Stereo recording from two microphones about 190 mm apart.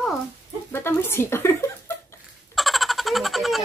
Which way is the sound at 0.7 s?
10° left (ahead or behind).